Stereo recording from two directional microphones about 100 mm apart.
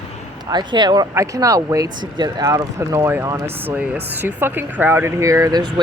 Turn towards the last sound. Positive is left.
turn(degrees=-45)  # may be behind; listen again after turning